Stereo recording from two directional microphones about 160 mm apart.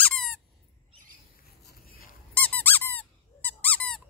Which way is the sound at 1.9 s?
65° left (ahead or behind).